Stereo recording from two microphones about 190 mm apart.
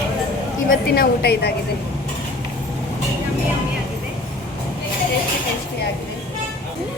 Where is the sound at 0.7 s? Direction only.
55° left (ahead or behind).